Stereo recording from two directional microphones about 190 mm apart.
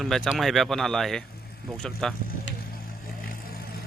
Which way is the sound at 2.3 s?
50° left (ahead or behind).